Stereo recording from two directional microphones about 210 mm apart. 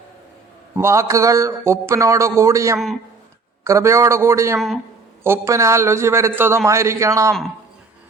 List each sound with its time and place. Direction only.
0.8 s a man's voice: 15° right (ahead or behind)